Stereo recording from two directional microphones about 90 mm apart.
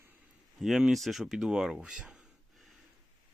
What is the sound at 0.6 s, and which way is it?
Speech, 5° right (ahead or behind).